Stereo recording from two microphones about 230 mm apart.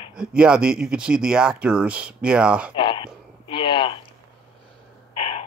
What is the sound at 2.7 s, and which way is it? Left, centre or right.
Speech, left.